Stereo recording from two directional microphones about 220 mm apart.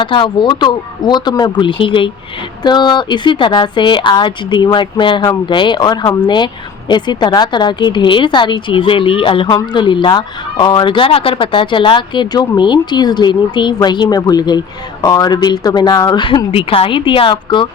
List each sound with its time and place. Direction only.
0.0 s speech: 20° left (ahead or behind)